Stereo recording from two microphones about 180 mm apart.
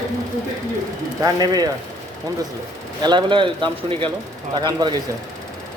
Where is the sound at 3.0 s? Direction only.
25° right (ahead or behind).